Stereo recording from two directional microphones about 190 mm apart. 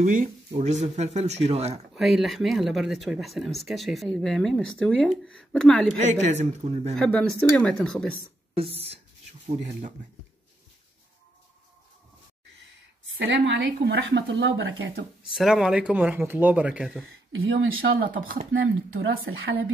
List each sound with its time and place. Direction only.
0.0 s speech: 45° right (ahead or behind)
2.0 s speech: centre (ahead or behind)
5.9 s speech: 40° right (ahead or behind)
7.0 s speech: 5° left (ahead or behind)
8.5 s speech: 30° right (ahead or behind)
13.0 s speech: 75° right (ahead or behind)
15.3 s speech: centre (ahead or behind)
17.9 s speech: 50° right (ahead or behind)
18.5 s speech: 90° right; by 19.5 s 60° right (ahead or behind)